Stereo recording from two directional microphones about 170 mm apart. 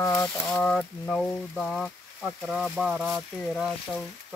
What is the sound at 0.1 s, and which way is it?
Speech, 10° left (ahead or behind).